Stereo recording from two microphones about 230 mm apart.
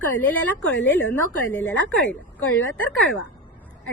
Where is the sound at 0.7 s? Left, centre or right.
Left.